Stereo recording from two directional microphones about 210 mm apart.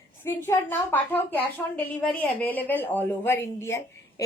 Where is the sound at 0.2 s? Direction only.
10° left (ahead or behind).